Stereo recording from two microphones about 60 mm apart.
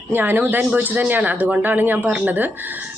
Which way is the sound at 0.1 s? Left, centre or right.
Right.